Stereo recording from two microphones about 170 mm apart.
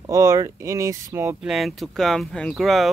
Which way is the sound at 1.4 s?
Centre (ahead or behind).